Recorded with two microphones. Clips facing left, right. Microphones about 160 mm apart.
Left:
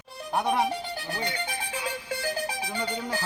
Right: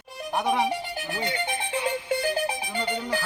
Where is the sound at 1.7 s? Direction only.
25° right (ahead or behind).